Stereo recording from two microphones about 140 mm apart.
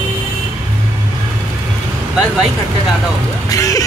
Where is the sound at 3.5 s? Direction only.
25° left (ahead or behind).